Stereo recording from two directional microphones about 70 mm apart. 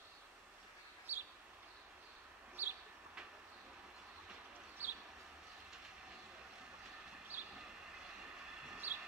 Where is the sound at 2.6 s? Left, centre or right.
Right.